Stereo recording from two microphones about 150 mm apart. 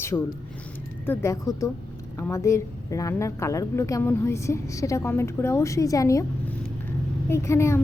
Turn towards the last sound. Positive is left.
turn(degrees=20)  # may be behind; listen again after turning